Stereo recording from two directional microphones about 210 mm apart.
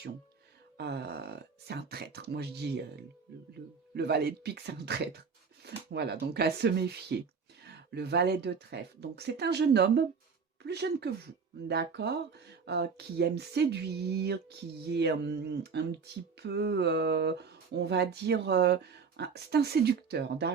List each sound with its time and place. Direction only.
0.8 s a man's voice: 50° right (ahead or behind)